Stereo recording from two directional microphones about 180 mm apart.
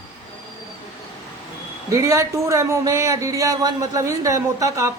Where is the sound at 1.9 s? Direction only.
15° right (ahead or behind).